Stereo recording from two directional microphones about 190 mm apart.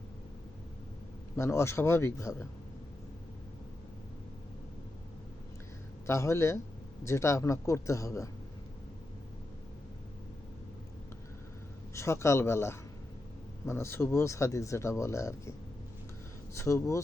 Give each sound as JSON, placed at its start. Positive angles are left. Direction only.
{"t": 1.4, "sound": "speech", "side_deg": 15}
{"t": 6.1, "sound": "speech", "side_deg": 15}
{"t": 11.9, "sound": "speech", "side_deg": 15}
{"t": 16.6, "sound": "speech", "side_deg": 15}